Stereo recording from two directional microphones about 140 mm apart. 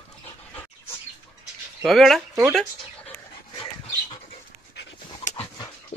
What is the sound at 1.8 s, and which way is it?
Speech, centre (ahead or behind).